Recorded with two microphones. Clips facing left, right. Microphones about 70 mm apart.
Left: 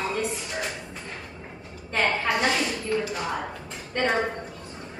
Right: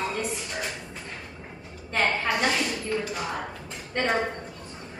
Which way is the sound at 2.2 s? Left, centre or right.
Centre.